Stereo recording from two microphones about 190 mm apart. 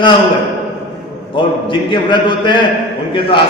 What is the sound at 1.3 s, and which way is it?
A man's voice, 25° left (ahead or behind).